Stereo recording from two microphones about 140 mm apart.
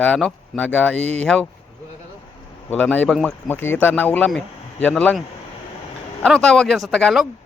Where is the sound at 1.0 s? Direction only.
50° right (ahead or behind).